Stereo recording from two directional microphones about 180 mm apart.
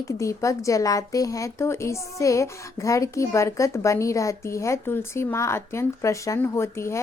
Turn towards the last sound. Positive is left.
turn(degrees=15)  # may be behind; listen again after turning